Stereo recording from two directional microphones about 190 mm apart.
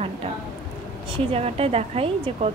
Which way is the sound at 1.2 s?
30° right (ahead or behind).